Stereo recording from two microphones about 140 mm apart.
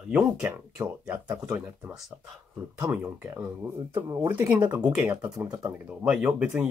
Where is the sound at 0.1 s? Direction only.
10° right (ahead or behind).